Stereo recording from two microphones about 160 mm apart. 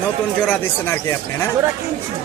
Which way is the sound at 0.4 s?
10° left (ahead or behind).